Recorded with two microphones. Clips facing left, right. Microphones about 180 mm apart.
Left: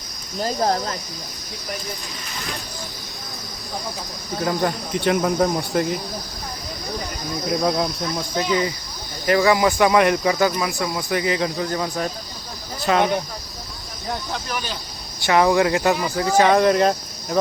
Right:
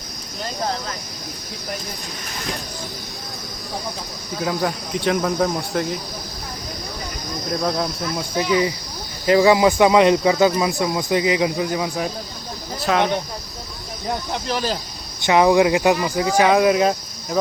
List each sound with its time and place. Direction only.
0.3 s speech: 35° left (ahead or behind)
4.4 s speech: centre (ahead or behind)
7.5 s speech: centre (ahead or behind)
8.4 s speech: 15° right (ahead or behind); by 13.1 s centre (ahead or behind)
14.3 s speech: 30° right (ahead or behind)
15.2 s speech: 15° right (ahead or behind)
16.5 s speech: 5° right (ahead or behind)